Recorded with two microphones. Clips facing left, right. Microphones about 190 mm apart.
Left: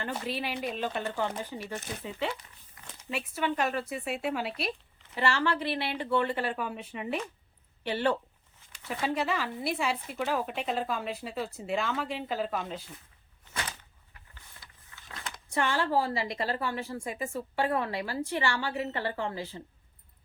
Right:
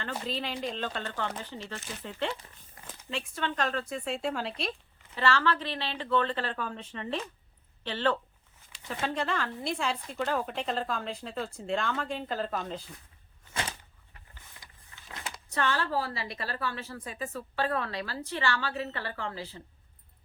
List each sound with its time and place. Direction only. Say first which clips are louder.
0.0 s a woman's voice: left 1 dB; 10° left (ahead or behind)
2.8 s zipper: right 2 dB; 30° right (ahead or behind)
3.1 s a woman's voice: left 3 dB; 10° left (ahead or behind)
14.6 s vehicle: even; 15° right (ahead or behind)
15.5 s a woman's voice: left 2 dB; 15° left (ahead or behind)